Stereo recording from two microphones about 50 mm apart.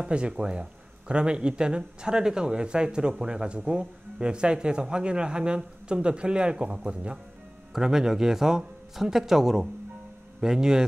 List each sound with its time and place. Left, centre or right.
0.0 s speech: centre
7.7 s speech: centre